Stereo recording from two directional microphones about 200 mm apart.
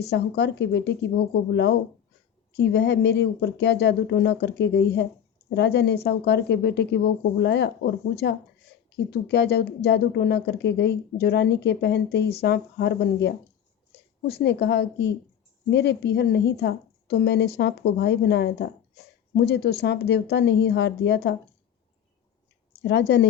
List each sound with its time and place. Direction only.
0.1 s speech: 55° left (ahead or behind)
2.6 s speech: 60° left (ahead or behind)
22.8 s speech: 60° left (ahead or behind)